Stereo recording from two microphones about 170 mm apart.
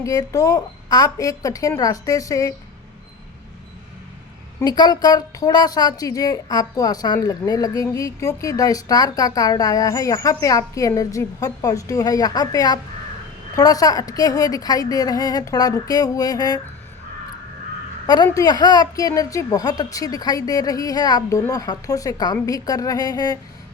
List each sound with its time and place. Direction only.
0.0 s a woman's voice: 20° left (ahead or behind)
4.6 s a woman's voice: 25° left (ahead or behind)
18.0 s a woman's voice: 25° left (ahead or behind)